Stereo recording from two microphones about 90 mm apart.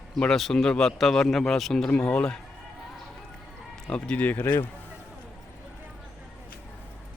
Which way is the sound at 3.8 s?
10° left (ahead or behind).